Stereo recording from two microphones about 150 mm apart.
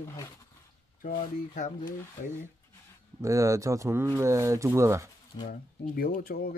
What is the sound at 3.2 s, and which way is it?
Speech, 20° right (ahead or behind).